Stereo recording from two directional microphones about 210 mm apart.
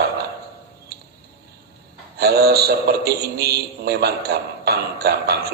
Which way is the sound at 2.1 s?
50° right (ahead or behind).